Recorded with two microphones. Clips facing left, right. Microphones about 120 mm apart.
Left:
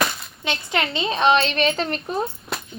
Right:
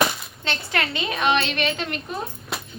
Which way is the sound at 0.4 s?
20° left (ahead or behind).